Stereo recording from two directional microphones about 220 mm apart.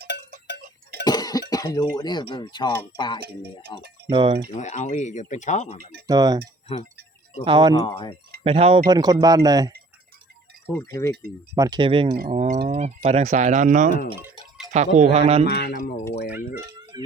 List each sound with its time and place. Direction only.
1.0 s cough: 15° left (ahead or behind)
2.3 s speech: 20° left (ahead or behind)
4.1 s speech: 20° right (ahead or behind)
4.5 s speech: 30° left (ahead or behind)
6.1 s speech: 15° right (ahead or behind)
7.4 s speech: 20° right (ahead or behind)
7.7 s speech: 20° left (ahead or behind)
8.4 s speech: 25° right (ahead or behind)
11.0 s speech: 10° left (ahead or behind)
11.5 s speech: 15° right (ahead or behind)
15.4 s speech: 45° left (ahead or behind)